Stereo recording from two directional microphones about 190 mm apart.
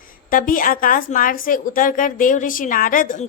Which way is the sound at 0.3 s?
45° left (ahead or behind).